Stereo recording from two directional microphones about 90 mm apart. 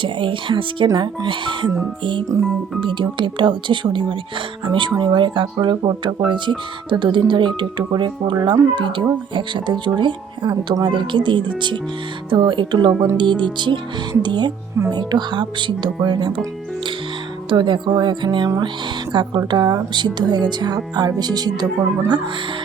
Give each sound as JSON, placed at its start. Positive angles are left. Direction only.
{"t": 0.0, "sound": "speech", "side_deg": -70}
{"t": 2.3, "sound": "speech", "side_deg": -35}
{"t": 2.8, "sound": "speech", "side_deg": -65}
{"t": 16.0, "sound": "speech", "side_deg": -45}
{"t": 17.5, "sound": "speech", "side_deg": -60}